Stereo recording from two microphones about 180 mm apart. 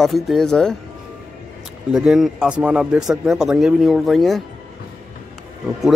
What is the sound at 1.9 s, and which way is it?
Speech, centre (ahead or behind).